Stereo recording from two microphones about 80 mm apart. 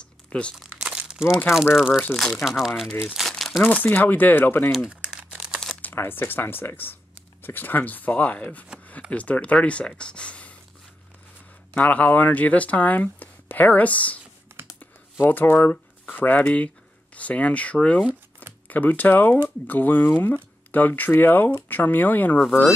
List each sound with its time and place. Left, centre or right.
0.3 s speech: centre
0.6 s crumpling: centre
1.5 s speech: left
1.9 s speech: left
2.1 s speech: centre
3.1 s crumpling: centre
3.6 s speech: left
4.7 s crumpling: centre
5.8 s speech: left
11.7 s speech: centre
14.5 s computer keyboard: right
15.2 s speech: left